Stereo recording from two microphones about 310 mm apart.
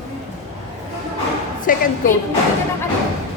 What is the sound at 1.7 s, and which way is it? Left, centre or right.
Speech, left.